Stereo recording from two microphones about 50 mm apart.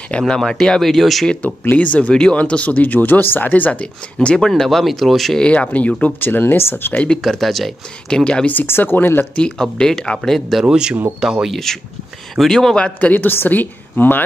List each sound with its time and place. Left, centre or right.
0.3 s speech: centre
1.4 s speech: left
3.8 s speech: centre
4.6 s speech: centre
5.4 s speech: left
6.1 s speech: left
7.2 s speech: centre
8.1 s speech: centre
8.6 s speech: left
9.3 s speech: centre
10.6 s speech: centre
11.5 s speech: centre
13.0 s speech: left